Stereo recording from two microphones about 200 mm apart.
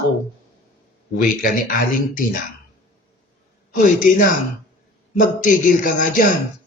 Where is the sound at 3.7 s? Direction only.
40° left (ahead or behind).